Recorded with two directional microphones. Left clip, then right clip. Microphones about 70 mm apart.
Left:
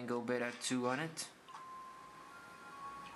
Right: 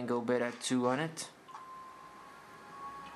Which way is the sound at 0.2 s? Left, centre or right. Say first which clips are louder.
Right 5 dB; right.